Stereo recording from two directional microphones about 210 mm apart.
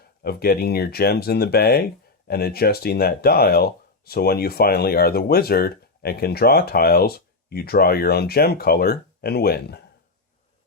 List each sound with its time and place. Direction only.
0.2 s speech: 45° left (ahead or behind)